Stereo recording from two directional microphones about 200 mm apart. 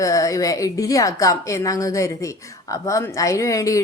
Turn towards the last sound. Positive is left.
turn(degrees=15)  # may be behind; listen again after turning